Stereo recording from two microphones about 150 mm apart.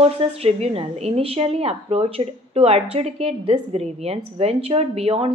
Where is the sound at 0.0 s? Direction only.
45° right (ahead or behind).